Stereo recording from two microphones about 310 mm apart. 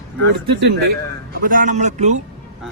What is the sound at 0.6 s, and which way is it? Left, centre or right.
A man's voice, right.